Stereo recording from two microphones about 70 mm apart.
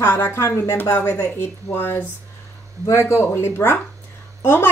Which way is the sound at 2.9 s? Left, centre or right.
Left.